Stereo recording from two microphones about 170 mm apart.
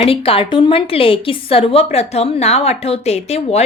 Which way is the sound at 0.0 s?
35° left (ahead or behind).